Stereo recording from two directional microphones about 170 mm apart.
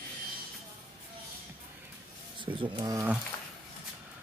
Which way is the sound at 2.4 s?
30° right (ahead or behind).